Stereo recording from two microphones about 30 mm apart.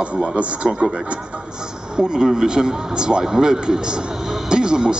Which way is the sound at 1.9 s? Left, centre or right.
Right.